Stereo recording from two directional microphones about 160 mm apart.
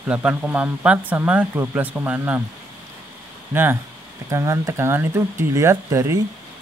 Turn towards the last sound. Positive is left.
turn(degrees=-15)  # may be behind; listen again after turning